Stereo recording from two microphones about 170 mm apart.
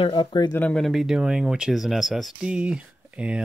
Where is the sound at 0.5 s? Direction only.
5° left (ahead or behind).